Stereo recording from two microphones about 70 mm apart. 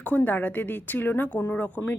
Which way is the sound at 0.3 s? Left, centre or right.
Left.